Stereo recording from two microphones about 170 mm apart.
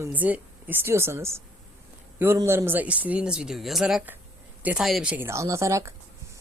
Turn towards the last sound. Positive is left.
turn(degrees=-15)  # may be behind; listen again after turning